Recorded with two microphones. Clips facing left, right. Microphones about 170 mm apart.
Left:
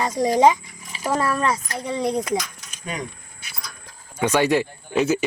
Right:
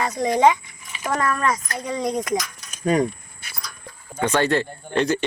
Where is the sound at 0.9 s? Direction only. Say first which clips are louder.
Left 2 dB; 35° left (ahead or behind).